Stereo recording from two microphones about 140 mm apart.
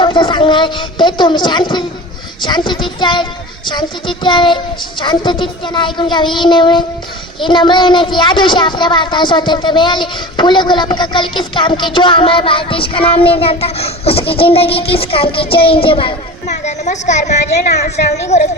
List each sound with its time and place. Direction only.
0.0 s a woman's voice: 35° left (ahead or behind)
16.6 s a woman's voice: 55° left (ahead or behind)